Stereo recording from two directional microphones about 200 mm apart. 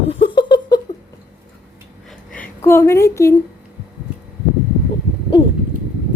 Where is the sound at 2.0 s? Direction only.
5° left (ahead or behind).